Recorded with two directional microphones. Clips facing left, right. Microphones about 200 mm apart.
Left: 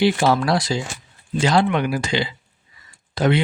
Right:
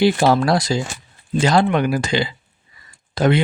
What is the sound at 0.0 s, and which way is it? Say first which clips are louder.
Speech: right 2 dB; 40° right (ahead or behind).